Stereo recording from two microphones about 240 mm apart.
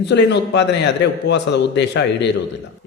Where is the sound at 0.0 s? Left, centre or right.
Left.